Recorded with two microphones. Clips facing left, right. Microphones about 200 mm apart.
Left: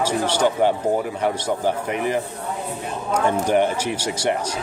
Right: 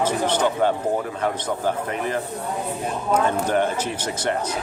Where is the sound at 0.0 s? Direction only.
10° left (ahead or behind).